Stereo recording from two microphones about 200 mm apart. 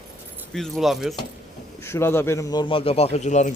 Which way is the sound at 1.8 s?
10° left (ahead or behind).